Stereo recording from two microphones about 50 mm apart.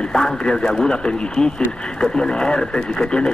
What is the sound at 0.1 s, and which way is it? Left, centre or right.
Speech, centre.